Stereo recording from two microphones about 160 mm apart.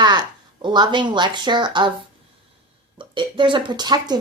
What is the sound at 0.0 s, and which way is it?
Speech, 30° right (ahead or behind).